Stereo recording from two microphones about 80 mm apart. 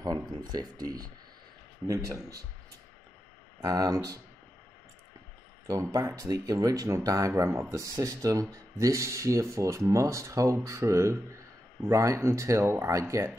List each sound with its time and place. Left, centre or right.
0.4 s speech: right
1.9 s speech: right
3.6 s speech: right
5.7 s speech: right